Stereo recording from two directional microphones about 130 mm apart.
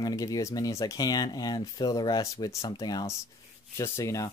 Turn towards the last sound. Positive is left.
turn(degrees=25)  # may be behind; listen again after turning